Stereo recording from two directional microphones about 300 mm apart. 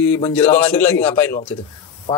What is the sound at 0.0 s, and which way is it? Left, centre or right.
Speech, centre.